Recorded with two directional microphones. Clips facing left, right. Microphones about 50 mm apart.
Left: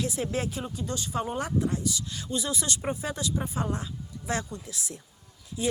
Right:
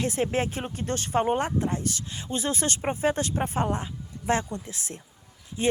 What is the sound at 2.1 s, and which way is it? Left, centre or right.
Speech, right.